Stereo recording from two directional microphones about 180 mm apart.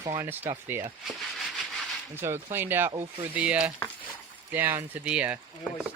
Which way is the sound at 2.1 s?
15° right (ahead or behind).